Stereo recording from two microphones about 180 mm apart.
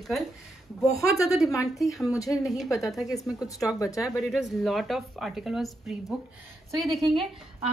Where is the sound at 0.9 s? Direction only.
20° left (ahead or behind).